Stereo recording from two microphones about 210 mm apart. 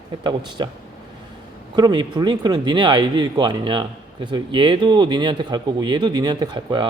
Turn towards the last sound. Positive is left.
turn(degrees=-20)  # may be behind; listen again after turning